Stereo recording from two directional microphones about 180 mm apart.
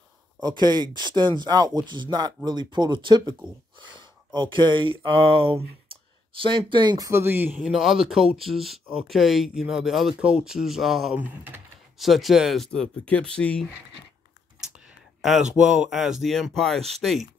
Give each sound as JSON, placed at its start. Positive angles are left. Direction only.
{"t": 0.4, "sound": "speech", "side_deg": -20}
{"t": 15.5, "sound": "speech", "side_deg": -5}